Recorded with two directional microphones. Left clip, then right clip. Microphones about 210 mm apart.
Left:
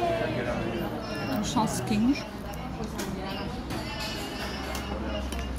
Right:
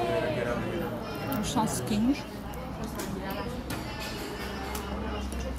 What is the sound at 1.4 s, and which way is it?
Speech, 5° right (ahead or behind).